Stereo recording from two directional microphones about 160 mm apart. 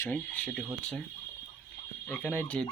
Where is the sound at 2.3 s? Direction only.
5° left (ahead or behind).